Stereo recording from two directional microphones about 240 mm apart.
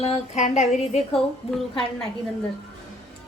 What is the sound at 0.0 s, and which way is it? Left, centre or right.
Speech, left.